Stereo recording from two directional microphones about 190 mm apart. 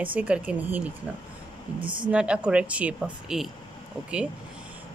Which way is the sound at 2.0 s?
5° right (ahead or behind).